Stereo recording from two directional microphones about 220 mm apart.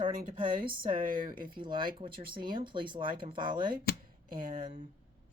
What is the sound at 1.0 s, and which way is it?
Speech, 40° right (ahead or behind).